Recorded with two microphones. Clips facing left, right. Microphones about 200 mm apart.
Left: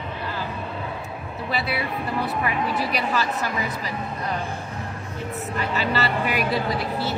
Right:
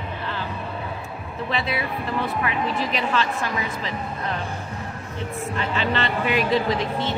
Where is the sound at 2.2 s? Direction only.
5° left (ahead or behind).